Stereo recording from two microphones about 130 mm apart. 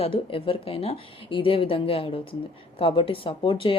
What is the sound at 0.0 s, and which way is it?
A woman's voice, 40° left (ahead or behind).